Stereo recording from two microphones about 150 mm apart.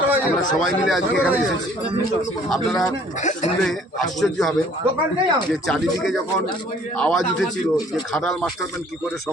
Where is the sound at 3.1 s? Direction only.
55° left (ahead or behind).